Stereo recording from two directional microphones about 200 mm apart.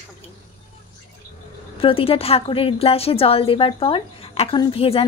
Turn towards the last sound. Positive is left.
turn(degrees=30)  # may be behind; listen again after turning